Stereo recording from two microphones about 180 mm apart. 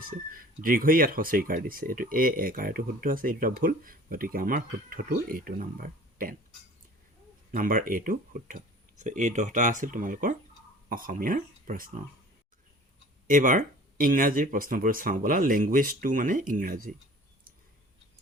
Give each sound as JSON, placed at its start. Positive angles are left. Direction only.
{"t": 0.0, "sound": "speech", "side_deg": -50}
{"t": 7.5, "sound": "speech", "side_deg": -50}
{"t": 13.2, "sound": "speech", "side_deg": -45}